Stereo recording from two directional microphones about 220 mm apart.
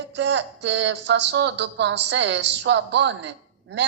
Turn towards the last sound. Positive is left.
turn(degrees=-50)  # may be behind; listen again after turning